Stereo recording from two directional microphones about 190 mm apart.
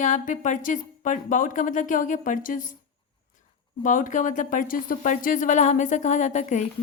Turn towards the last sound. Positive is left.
turn(degrees=40)  # may be behind; listen again after turning